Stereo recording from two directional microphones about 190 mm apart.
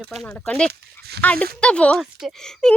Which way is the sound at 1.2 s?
5° left (ahead or behind).